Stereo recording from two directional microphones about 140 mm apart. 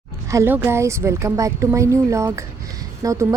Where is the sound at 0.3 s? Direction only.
20° right (ahead or behind).